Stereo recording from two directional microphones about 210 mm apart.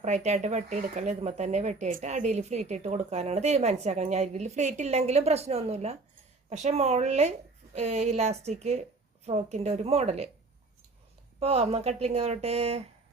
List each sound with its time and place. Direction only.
0.0 s speech: 35° right (ahead or behind)
11.3 s a woman's voice: 30° right (ahead or behind)